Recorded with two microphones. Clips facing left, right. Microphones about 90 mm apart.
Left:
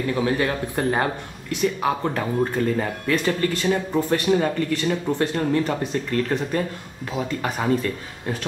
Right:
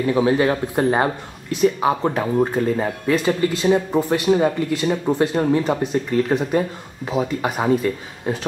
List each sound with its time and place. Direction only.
0.0 s speech: 20° right (ahead or behind)